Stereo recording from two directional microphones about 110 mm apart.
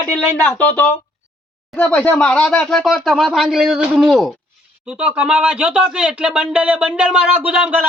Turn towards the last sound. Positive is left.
turn(degrees=-10)  # may be behind; listen again after turning